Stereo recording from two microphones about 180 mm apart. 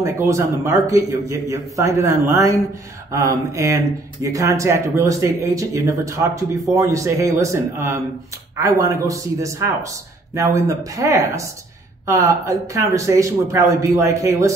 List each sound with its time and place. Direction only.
0.0 s speech: 15° right (ahead or behind)